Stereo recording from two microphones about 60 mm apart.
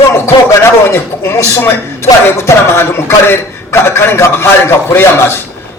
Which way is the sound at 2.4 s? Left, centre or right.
Left.